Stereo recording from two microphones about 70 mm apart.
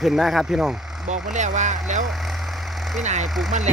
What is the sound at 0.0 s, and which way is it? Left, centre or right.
Speech, centre.